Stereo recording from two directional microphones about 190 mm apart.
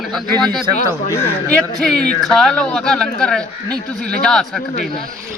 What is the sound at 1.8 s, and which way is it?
A man's voice, 5° left (ahead or behind).